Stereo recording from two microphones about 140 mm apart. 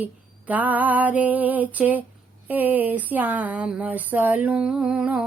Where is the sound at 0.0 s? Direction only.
10° right (ahead or behind).